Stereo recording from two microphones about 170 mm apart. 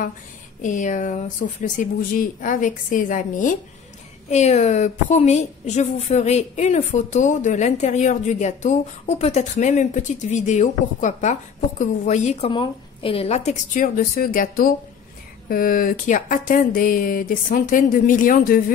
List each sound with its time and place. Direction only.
0.6 s a woman's voice: 45° left (ahead or behind)